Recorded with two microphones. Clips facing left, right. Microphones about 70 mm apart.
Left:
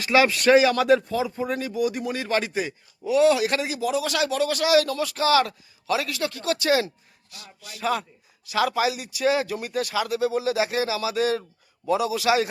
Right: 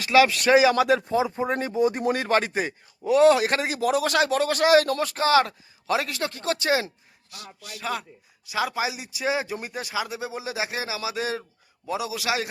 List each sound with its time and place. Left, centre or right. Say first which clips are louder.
0.0 s speech: even; centre
1.0 s a man's voice: right 2 dB; right
2.0 s a man's voice: right 3 dB; right
7.3 s speech: right 3 dB; centre